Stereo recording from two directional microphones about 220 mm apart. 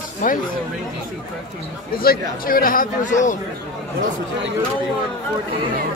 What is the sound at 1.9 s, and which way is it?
Speech, 45° left (ahead or behind).